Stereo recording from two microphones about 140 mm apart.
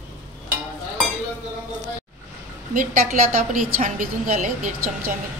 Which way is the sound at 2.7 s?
70° right (ahead or behind).